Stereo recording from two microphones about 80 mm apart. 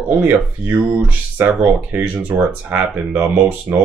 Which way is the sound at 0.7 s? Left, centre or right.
Right.